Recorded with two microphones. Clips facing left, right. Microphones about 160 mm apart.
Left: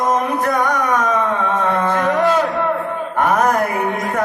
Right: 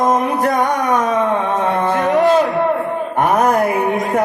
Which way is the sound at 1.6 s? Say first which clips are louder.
Right 1 dB; 25° right (ahead or behind).